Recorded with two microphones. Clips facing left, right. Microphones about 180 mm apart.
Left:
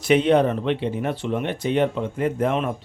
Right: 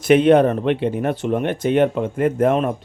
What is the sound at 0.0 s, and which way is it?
Speech, 50° right (ahead or behind).